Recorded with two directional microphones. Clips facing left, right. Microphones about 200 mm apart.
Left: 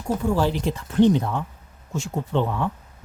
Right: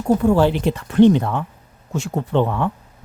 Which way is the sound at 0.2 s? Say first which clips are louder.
Right 6 dB; 65° right (ahead or behind).